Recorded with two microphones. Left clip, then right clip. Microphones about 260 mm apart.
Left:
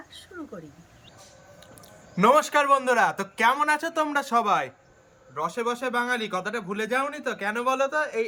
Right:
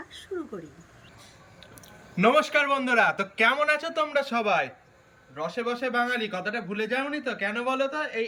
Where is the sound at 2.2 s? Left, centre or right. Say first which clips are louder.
Left 2 dB; centre.